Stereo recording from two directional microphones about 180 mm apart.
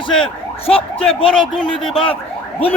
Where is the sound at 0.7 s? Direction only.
30° left (ahead or behind).